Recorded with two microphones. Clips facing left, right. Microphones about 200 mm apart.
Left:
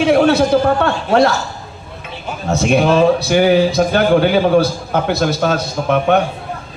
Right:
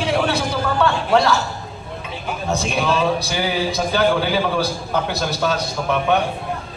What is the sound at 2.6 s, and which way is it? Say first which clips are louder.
A man's voice: left 10 dB; 60° left (ahead or behind).